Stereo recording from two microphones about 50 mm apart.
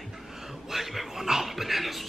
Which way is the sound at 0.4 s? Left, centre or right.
Centre.